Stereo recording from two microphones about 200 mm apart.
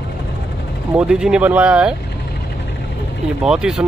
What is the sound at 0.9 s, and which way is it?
Speech, 5° right (ahead or behind).